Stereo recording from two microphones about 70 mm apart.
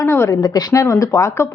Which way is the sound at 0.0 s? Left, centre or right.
Left.